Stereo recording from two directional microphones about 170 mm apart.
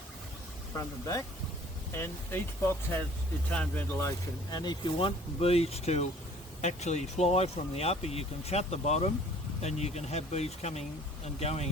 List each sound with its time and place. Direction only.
0.8 s speech: 20° left (ahead or behind)
4.5 s speech: 25° left (ahead or behind)